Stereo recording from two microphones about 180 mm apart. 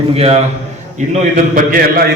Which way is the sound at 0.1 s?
35° right (ahead or behind).